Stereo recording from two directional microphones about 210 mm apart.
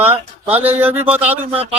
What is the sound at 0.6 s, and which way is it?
Speech, 10° right (ahead or behind).